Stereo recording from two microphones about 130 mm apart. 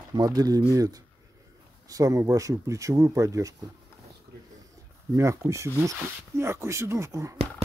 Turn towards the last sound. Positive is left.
turn(degrees=-25)  # may be behind; listen again after turning